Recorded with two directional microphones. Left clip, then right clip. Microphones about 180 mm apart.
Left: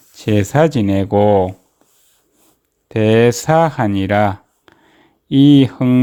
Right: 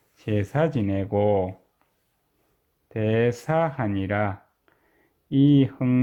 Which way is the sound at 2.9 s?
25° left (ahead or behind).